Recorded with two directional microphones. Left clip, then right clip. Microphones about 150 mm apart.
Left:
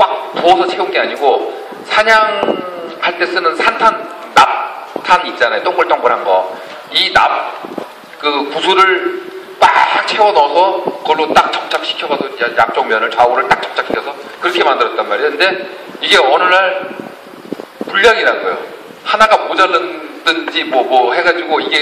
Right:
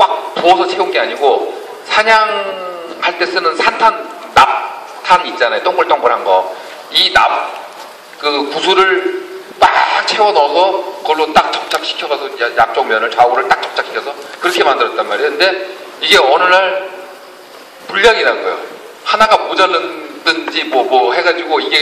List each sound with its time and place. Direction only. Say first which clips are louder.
0.0 s a man's voice: even; 45° right (ahead or behind)
17.9 s a man's voice: even; 45° right (ahead or behind)